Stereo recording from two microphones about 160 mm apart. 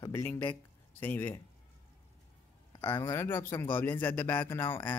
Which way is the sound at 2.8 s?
20° left (ahead or behind).